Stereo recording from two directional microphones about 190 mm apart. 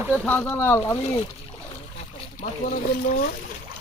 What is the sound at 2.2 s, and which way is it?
Speech, 40° left (ahead or behind).